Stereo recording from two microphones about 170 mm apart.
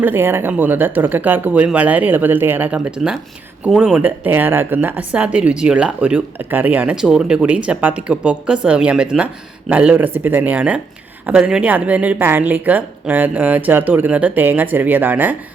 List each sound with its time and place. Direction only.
0.0 s speech: 15° right (ahead or behind)